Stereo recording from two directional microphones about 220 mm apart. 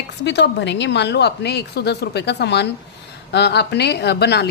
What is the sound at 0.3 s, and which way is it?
A woman's voice, 50° left (ahead or behind).